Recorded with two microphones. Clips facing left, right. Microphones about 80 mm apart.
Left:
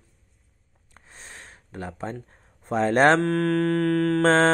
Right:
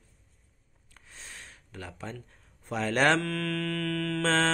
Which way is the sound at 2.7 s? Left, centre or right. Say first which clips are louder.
Left 7 dB; left.